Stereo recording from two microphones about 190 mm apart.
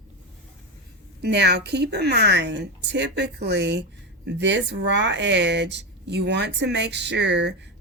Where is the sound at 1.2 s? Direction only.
65° right (ahead or behind).